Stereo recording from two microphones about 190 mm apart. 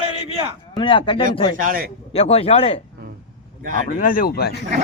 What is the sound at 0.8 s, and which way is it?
Speech, 25° left (ahead or behind).